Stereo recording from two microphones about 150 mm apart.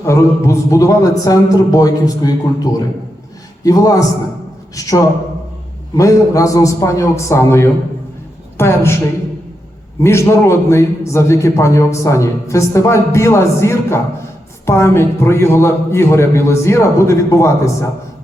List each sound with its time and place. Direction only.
0.0 s a man's voice: 20° left (ahead or behind)
10.0 s a man's voice: 20° left (ahead or behind)